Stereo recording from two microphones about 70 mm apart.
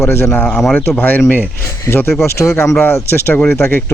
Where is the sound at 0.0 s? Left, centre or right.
Left.